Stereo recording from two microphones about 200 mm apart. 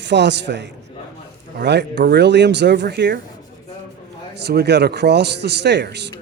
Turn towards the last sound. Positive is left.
turn(degrees=-60)  # may be behind; listen again after turning